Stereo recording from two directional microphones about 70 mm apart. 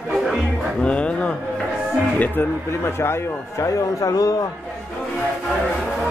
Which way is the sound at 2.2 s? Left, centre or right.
Left.